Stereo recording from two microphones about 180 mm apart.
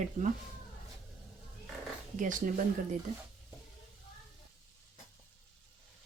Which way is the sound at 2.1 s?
45° right (ahead or behind).